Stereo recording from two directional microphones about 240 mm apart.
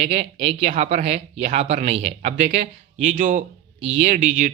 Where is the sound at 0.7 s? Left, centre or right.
Right.